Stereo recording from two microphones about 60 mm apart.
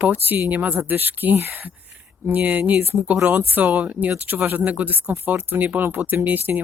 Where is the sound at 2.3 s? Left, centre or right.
Right.